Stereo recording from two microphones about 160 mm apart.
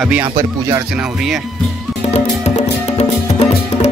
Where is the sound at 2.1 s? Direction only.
45° left (ahead or behind).